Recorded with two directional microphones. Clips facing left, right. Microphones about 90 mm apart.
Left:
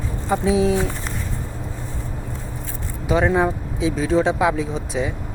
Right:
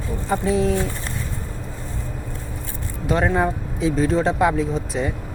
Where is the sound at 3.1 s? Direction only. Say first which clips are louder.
Left 2 dB; 5° left (ahead or behind).